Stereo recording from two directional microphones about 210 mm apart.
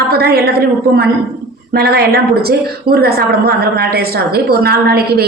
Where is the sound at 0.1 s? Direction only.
45° right (ahead or behind).